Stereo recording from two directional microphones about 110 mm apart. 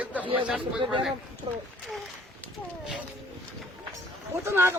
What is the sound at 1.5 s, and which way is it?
Speech, 60° right (ahead or behind).